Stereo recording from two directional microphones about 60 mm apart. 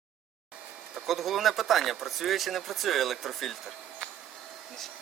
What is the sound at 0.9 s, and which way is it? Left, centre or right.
Speech, centre.